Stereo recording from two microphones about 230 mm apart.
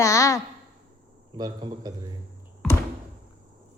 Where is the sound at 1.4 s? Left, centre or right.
Centre.